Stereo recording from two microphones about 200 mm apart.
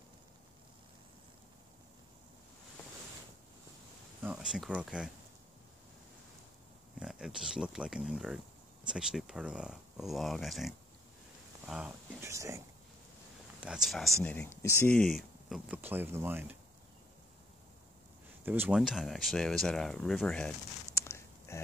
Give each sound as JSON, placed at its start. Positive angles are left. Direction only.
{"t": 4.2, "sound": "speech", "side_deg": -5}
{"t": 7.0, "sound": "speech", "side_deg": -5}
{"t": 13.6, "sound": "speech", "side_deg": -5}
{"t": 18.4, "sound": "speech", "side_deg": -10}